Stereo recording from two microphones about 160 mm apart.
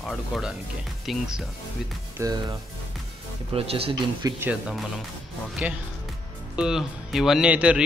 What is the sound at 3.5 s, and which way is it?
Speech, 35° right (ahead or behind).